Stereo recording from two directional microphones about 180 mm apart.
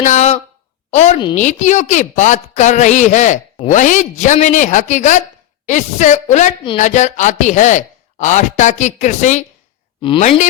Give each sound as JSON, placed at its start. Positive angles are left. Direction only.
{"t": 0.0, "sound": "a woman's voice", "side_deg": 40}
{"t": 10.0, "sound": "speech", "side_deg": 30}